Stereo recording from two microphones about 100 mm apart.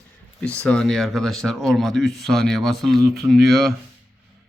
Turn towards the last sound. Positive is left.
turn(degrees=0)  # may be behind; listen again after turning